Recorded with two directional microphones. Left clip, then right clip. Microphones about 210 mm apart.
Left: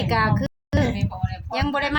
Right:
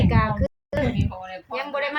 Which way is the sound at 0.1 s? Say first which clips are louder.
Left 2 dB; 55° left (ahead or behind).